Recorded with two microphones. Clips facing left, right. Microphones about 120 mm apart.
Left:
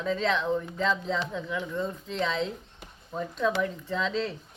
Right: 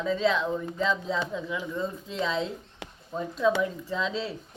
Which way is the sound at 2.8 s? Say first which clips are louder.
Right 6 dB; 90° right.